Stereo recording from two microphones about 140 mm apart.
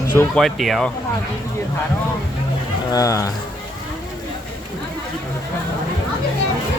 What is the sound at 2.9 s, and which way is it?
Speech, 25° left (ahead or behind).